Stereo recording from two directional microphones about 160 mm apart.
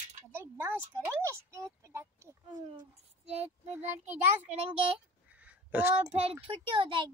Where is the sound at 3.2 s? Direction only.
40° right (ahead or behind).